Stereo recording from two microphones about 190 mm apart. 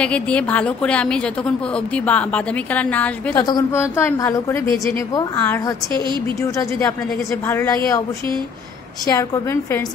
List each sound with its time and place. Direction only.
0.0 s a woman's voice: 5° left (ahead or behind)
7.4 s a woman's voice: 15° left (ahead or behind)
9.0 s a woman's voice: 15° left (ahead or behind)